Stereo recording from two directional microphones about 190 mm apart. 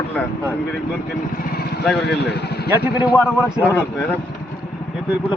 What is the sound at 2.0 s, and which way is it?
Speech, 60° left (ahead or behind).